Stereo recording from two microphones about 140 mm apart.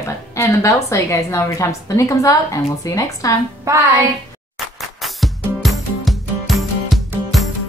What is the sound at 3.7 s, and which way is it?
Music, 20° right (ahead or behind).